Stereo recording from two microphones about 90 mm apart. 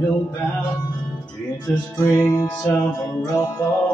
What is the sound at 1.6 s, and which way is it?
Music, 40° left (ahead or behind).